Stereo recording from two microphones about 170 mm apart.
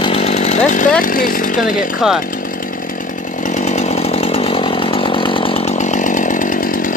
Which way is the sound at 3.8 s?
35° left (ahead or behind).